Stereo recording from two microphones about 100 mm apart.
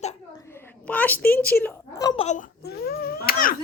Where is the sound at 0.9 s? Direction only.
15° left (ahead or behind).